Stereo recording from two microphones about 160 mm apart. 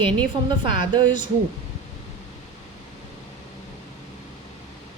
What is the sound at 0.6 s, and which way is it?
Speech, 30° right (ahead or behind).